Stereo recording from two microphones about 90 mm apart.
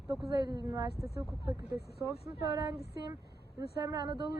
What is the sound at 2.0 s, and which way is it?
Speech, 40° right (ahead or behind).